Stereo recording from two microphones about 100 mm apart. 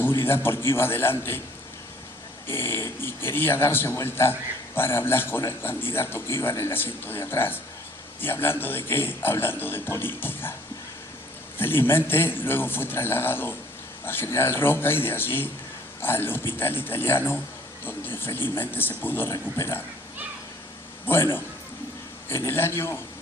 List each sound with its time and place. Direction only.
0.0 s a man's voice: 25° left (ahead or behind)
2.5 s a man's voice: 25° left (ahead or behind)
11.5 s a man's voice: 20° left (ahead or behind)
21.1 s a man's voice: 25° left (ahead or behind)